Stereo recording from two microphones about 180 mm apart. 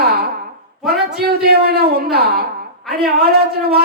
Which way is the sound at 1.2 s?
60° right (ahead or behind).